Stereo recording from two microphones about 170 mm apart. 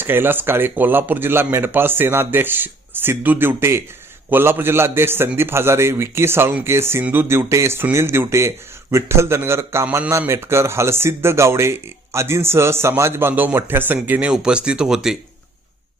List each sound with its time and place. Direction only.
0.0 s a man's voice: 10° right (ahead or behind)